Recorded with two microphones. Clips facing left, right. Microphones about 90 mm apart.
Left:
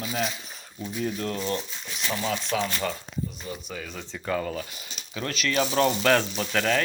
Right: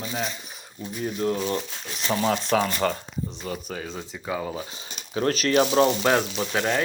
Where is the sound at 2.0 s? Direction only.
40° right (ahead or behind).